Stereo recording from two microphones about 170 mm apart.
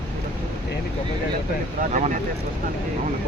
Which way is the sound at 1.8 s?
45° right (ahead or behind).